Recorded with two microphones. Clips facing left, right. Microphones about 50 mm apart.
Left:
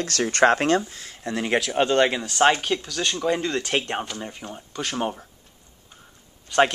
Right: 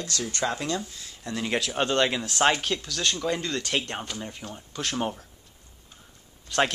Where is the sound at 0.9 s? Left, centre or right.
Left.